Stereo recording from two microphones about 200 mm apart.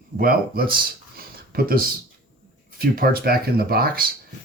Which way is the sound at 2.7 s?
45° right (ahead or behind).